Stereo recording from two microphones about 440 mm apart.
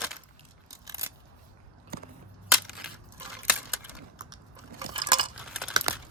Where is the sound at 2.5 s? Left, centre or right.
Centre.